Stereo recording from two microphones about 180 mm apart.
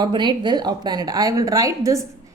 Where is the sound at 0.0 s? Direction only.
25° right (ahead or behind).